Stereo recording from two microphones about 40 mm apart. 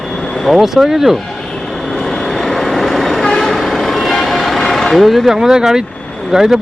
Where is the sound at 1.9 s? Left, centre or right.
Centre.